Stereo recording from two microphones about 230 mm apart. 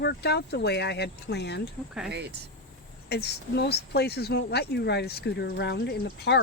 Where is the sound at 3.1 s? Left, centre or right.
Left.